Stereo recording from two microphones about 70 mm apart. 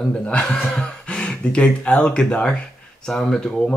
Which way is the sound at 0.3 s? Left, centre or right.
Centre.